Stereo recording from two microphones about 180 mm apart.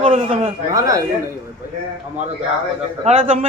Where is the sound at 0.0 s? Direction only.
30° right (ahead or behind).